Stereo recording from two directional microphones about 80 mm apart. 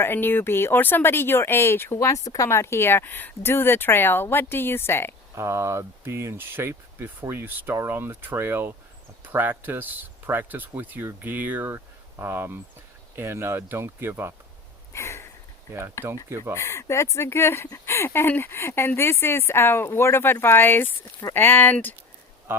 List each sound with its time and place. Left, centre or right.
0.0 s speech: left
5.3 s speech: right
14.9 s sniff: left
16.0 s speech: left